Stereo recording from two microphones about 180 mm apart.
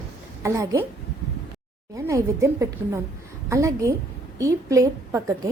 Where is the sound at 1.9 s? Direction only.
15° right (ahead or behind).